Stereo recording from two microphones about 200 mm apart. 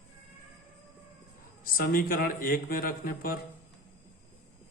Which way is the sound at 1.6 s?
45° left (ahead or behind).